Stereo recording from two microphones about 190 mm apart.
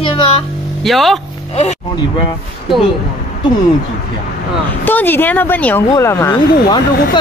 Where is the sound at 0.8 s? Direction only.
Centre (ahead or behind).